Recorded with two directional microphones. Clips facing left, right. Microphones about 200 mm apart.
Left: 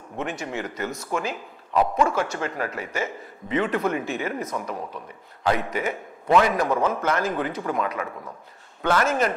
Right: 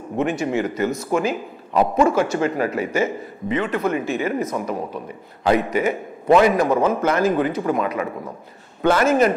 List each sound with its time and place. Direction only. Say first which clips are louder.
0.2 s speech: right 9 dB; 5° right (ahead or behind)
1.8 s a man's voice: right 4 dB; 25° right (ahead or behind)
2.0 s speech: right 7 dB; 5° right (ahead or behind)